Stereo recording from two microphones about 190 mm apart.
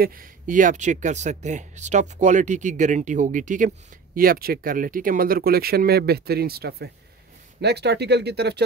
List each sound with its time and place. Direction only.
0.0 s speech: 50° right (ahead or behind)